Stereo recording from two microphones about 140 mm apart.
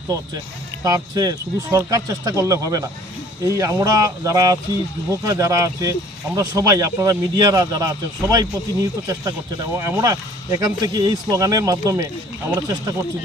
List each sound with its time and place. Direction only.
0.9 s speech: 25° right (ahead or behind)